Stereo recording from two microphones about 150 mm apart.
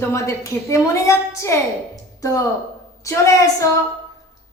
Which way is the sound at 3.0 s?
20° left (ahead or behind).